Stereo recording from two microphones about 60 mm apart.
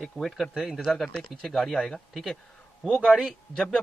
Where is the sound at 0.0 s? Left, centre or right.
Centre.